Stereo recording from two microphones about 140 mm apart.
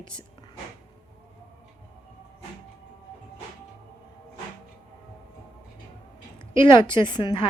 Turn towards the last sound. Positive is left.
turn(degrees=35)  # may be behind; listen again after turning